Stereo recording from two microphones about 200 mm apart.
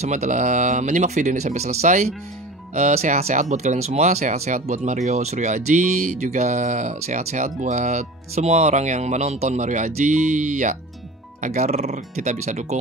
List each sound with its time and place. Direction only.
0.0 s speech: 35° right (ahead or behind)